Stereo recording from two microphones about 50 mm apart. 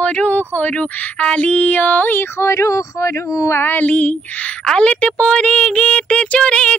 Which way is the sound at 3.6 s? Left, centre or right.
Left.